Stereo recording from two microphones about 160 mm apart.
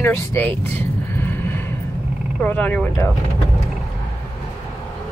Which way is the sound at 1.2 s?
15° left (ahead or behind).